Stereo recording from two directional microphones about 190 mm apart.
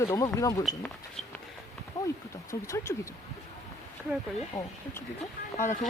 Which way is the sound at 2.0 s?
20° left (ahead or behind).